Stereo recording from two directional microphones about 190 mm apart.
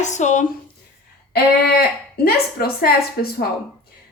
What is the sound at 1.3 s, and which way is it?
Speech, 55° left (ahead or behind).